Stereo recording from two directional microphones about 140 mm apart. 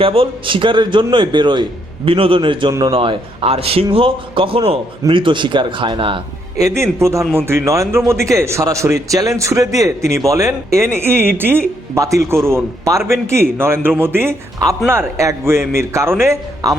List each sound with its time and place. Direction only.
0.0 s a man's voice: 40° right (ahead or behind)
6.6 s a man's voice: 20° right (ahead or behind)